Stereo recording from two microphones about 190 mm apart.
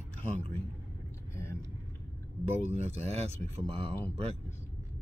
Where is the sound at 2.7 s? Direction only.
35° right (ahead or behind).